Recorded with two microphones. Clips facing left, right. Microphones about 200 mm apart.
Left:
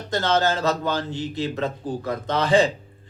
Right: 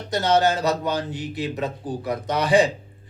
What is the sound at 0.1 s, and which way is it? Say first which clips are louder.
A man's voice: right 2 dB; 15° right (ahead or behind).